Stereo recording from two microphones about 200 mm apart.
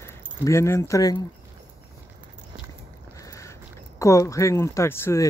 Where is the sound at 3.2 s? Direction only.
15° left (ahead or behind).